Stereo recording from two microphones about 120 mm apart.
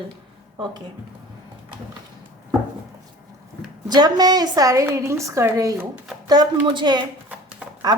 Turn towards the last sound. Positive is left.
turn(degrees=-10)  # may be behind; listen again after turning